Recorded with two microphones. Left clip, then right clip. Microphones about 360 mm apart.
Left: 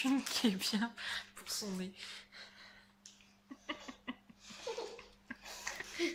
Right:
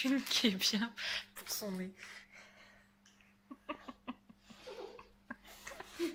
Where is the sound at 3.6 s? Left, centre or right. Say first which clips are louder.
Left 1 dB; centre.